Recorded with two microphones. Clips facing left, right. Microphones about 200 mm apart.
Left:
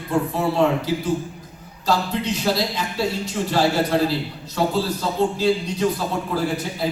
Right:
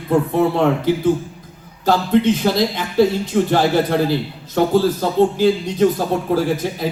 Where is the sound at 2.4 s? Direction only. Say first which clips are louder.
Right 4 dB; 55° right (ahead or behind).